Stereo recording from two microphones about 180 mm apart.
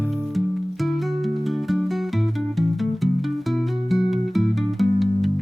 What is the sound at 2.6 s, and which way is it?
Music, centre (ahead or behind).